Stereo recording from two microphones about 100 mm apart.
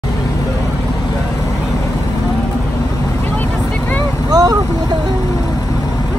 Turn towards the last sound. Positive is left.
turn(degrees=-40)  # may be behind; listen again after turning